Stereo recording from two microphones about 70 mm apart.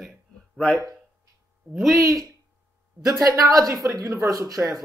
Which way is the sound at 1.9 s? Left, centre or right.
Right.